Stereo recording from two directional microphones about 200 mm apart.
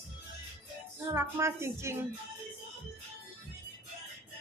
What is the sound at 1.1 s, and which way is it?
Child singing, 15° right (ahead or behind).